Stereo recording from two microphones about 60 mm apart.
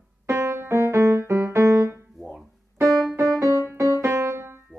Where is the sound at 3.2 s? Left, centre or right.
Right.